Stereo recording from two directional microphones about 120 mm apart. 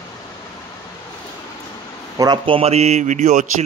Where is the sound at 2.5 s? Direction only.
55° right (ahead or behind); by 3.5 s 90° right.